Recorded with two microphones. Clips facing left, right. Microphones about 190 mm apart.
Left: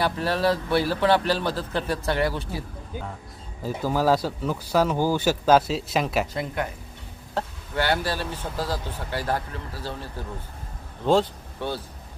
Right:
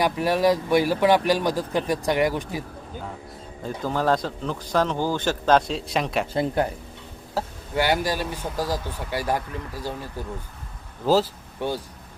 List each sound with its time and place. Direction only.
0.0 s a man's voice: 15° right (ahead or behind)
3.6 s a man's voice: 5° left (ahead or behind)
6.3 s speech: 30° right (ahead or behind)
7.3 s a man's voice: 10° right (ahead or behind)